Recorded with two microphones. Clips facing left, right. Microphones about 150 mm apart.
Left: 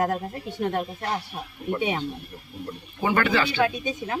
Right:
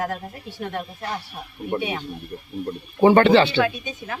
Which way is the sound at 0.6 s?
30° left (ahead or behind).